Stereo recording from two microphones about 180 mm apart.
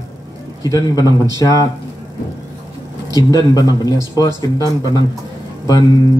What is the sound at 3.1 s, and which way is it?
A man's voice, 20° left (ahead or behind).